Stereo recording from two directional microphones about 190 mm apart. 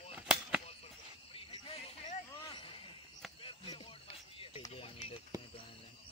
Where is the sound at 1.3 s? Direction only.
30° left (ahead or behind).